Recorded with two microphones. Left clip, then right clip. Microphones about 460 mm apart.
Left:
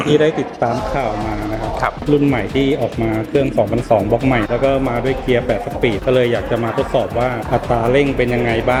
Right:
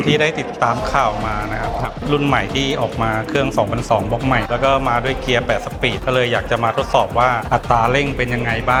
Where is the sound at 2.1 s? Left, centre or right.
Right.